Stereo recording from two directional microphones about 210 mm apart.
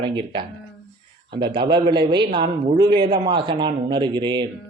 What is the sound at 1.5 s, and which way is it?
A man's voice, 20° right (ahead or behind).